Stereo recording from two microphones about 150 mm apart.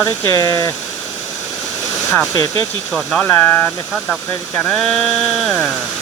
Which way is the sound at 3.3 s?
15° left (ahead or behind).